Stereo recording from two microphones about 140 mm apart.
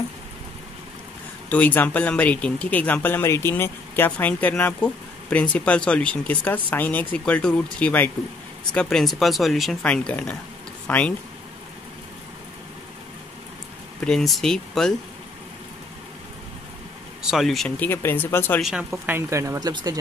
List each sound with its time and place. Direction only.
1.5 s speech: 10° left (ahead or behind)
14.0 s speech: centre (ahead or behind)
17.2 s speech: 5° right (ahead or behind)
17.7 s speech: 15° left (ahead or behind)
18.6 s speech: 5° right (ahead or behind)
18.9 s speech: 15° right (ahead or behind)